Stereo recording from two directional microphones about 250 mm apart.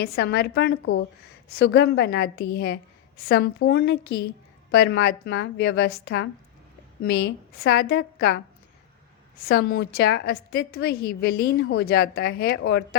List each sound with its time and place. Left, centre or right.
0.0 s a woman's voice: left
9.5 s a woman's voice: left